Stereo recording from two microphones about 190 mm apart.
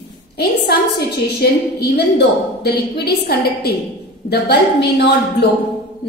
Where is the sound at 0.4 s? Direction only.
60° left (ahead or behind).